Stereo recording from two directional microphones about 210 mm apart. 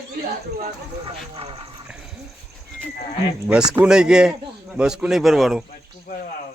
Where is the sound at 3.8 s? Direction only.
5° right (ahead or behind).